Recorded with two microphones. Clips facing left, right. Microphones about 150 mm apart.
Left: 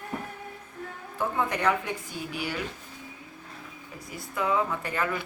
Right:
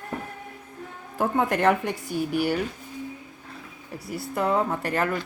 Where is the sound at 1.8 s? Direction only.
60° right (ahead or behind).